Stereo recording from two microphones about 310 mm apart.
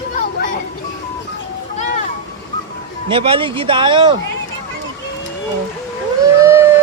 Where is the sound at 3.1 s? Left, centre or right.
Centre.